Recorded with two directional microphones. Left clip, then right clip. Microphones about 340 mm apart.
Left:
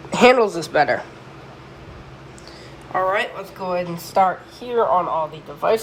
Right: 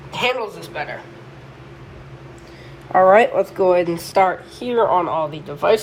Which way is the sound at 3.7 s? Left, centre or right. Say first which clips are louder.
Right 3 dB; right.